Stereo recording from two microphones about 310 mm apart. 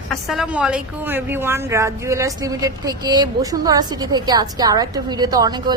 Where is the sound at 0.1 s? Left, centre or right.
Centre.